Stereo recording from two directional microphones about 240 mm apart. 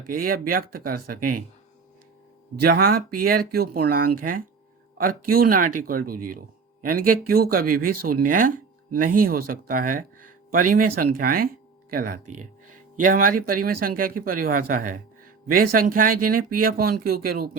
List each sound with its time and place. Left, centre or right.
0.1 s speech: right
2.6 s speech: right
12.2 s speech: right
13.0 s speech: right